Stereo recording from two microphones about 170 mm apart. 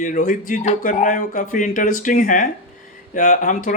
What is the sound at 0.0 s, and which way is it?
Speech, 50° left (ahead or behind).